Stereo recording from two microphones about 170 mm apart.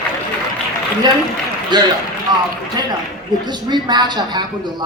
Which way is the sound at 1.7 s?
25° right (ahead or behind).